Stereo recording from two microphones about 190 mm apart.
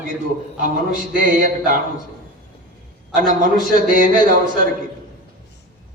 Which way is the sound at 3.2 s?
45° right (ahead or behind).